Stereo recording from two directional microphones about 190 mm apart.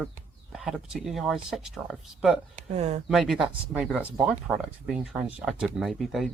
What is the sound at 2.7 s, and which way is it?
Speech, 35° right (ahead or behind).